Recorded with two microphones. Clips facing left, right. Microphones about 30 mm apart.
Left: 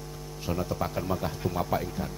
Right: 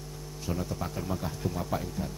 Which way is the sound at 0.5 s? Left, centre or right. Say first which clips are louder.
Left 4 dB; left.